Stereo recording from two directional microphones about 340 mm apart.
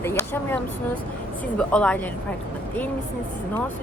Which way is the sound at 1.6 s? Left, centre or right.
Centre.